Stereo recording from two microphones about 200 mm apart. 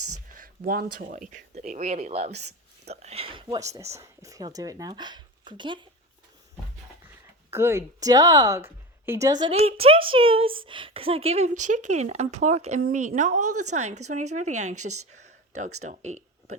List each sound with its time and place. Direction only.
0.3 s a woman's voice: 45° right (ahead or behind); by 5.8 s 25° right (ahead or behind)
7.5 s a woman's voice: 15° right (ahead or behind); by 14.8 s 35° right (ahead or behind)
14.8 s a woman's voice: 90° right
15.1 s a sound: 35° right (ahead or behind)
15.8 s speech: 35° right (ahead or behind)